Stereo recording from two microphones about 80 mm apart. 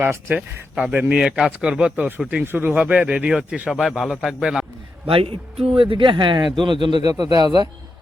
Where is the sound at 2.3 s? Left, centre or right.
Right; by 4.6 s centre.